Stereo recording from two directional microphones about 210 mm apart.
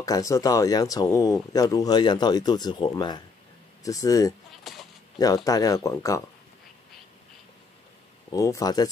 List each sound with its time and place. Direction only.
0.0 s speech: 15° left (ahead or behind)
4.7 s speech: centre (ahead or behind)
5.2 s speech: 15° left (ahead or behind)
8.3 s speech: 15° left (ahead or behind)